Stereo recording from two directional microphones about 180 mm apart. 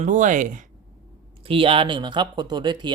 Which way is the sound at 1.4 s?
30° right (ahead or behind).